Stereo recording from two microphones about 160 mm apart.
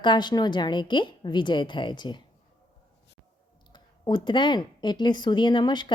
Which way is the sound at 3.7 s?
30° left (ahead or behind).